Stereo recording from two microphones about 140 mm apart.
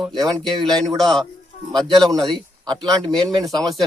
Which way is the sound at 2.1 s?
30° right (ahead or behind).